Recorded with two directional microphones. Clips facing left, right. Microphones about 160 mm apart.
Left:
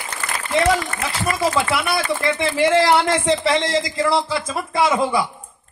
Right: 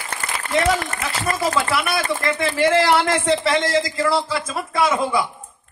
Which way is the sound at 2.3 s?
25° left (ahead or behind).